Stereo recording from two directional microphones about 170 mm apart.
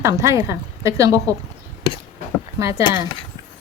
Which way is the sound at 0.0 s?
15° right (ahead or behind).